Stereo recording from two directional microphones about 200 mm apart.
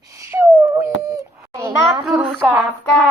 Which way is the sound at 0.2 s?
15° right (ahead or behind).